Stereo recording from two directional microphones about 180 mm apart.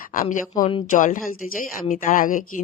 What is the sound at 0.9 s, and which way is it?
Speech, 45° left (ahead or behind).